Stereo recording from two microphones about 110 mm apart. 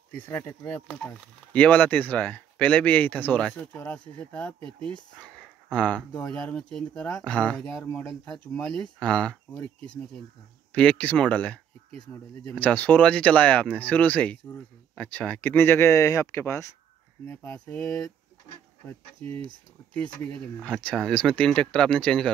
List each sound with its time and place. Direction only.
0.1 s speech: 20° left (ahead or behind)
19.2 s speech: 60° right (ahead or behind)
19.9 s speech: 10° left (ahead or behind)